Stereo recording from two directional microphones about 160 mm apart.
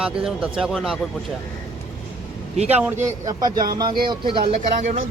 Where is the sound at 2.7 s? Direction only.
10° right (ahead or behind).